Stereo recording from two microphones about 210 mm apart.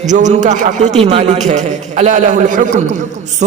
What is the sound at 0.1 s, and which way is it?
A man's voice, 35° right (ahead or behind).